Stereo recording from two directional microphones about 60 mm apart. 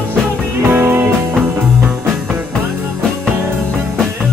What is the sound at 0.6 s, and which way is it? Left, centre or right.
Music, right.